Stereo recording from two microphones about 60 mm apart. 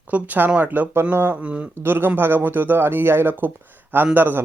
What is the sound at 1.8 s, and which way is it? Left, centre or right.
Speech, right.